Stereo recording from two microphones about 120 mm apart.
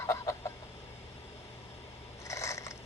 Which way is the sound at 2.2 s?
25° left (ahead or behind).